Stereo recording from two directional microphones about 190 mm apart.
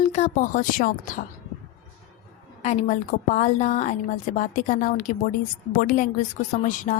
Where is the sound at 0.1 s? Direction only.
40° left (ahead or behind).